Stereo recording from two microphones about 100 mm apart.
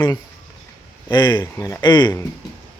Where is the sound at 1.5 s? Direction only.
25° left (ahead or behind).